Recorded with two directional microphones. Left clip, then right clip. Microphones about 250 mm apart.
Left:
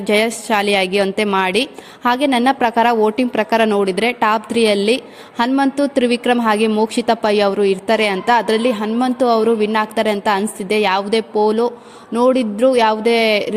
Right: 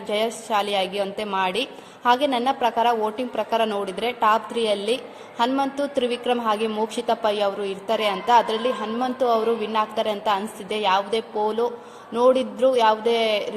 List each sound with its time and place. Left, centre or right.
0.1 s a woman's voice: left